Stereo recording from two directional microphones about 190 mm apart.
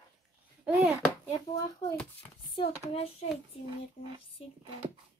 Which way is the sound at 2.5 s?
30° left (ahead or behind).